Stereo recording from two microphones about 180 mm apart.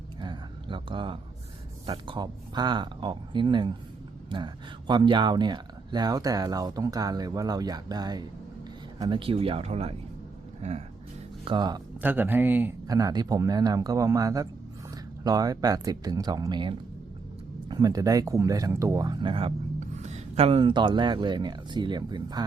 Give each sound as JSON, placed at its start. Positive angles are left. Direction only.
{"t": 0.2, "sound": "a sound", "side_deg": -25}
{"t": 1.9, "sound": "speech", "side_deg": -25}
{"t": 11.4, "sound": "speech", "side_deg": -25}
{"t": 11.9, "sound": "speech", "side_deg": -10}